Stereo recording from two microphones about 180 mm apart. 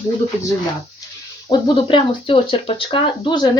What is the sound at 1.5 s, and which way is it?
Speech, 30° left (ahead or behind).